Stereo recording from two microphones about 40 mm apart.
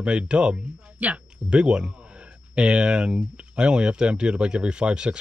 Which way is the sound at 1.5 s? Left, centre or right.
Right.